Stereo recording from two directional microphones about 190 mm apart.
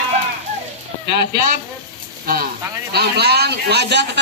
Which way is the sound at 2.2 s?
50° right (ahead or behind).